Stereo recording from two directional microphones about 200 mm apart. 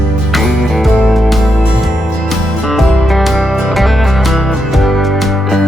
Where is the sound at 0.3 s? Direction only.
Centre (ahead or behind).